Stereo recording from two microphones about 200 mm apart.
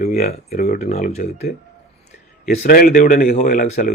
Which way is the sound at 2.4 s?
45° left (ahead or behind).